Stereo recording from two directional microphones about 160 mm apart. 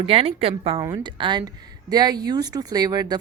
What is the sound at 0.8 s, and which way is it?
A woman's voice, 25° right (ahead or behind).